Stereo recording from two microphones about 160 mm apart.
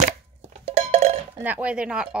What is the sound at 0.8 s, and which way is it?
Cowbell, 35° right (ahead or behind).